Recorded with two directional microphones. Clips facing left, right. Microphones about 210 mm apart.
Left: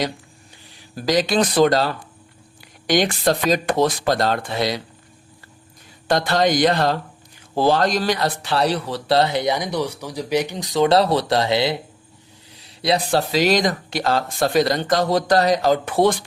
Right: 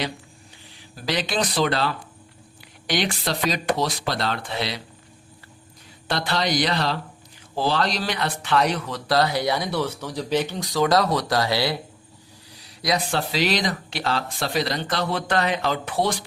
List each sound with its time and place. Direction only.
1.0 s speech: 40° left (ahead or behind)
6.1 s speech: 45° left (ahead or behind)